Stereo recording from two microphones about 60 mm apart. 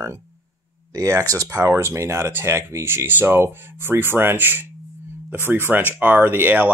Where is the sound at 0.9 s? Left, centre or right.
Right.